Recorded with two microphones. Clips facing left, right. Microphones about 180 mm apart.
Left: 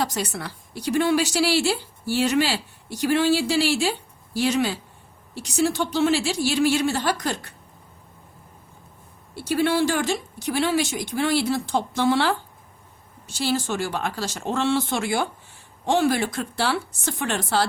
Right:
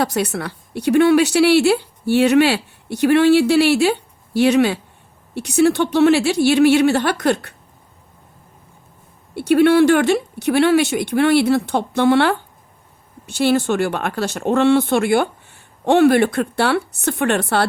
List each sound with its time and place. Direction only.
0.0 s a woman's voice: 60° right (ahead or behind)
9.3 s a woman's voice: 60° right (ahead or behind)